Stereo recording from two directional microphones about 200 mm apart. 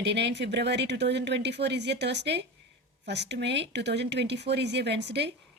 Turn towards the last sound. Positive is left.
turn(degrees=-60)  # may be behind; listen again after turning